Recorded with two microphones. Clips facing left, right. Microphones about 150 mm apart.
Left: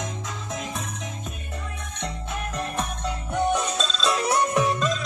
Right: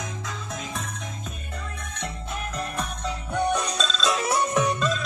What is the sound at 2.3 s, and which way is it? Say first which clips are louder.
Music: left 2 dB; centre (ahead or behind).